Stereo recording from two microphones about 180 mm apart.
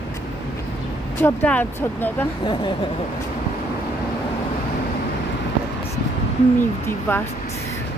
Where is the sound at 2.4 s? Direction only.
25° left (ahead or behind).